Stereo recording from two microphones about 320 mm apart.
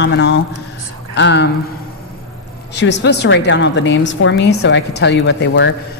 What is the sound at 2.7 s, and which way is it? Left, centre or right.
A woman's voice, left.